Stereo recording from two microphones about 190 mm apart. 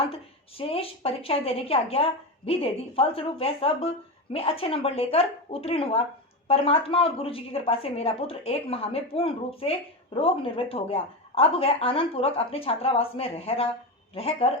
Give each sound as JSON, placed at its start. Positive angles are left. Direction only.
{"t": 0.0, "sound": "a woman's voice", "side_deg": 30}